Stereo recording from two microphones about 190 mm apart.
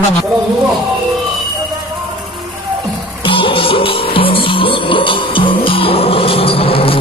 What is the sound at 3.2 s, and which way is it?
Music, 25° left (ahead or behind).